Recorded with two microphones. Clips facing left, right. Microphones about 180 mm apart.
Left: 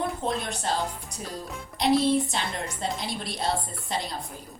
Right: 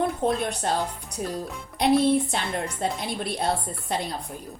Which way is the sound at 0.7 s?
55° right (ahead or behind).